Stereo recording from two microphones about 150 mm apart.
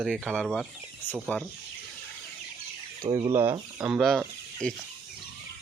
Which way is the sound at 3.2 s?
15° right (ahead or behind).